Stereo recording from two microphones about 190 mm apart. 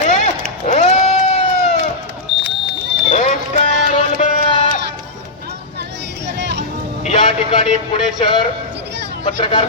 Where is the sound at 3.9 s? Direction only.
40° left (ahead or behind).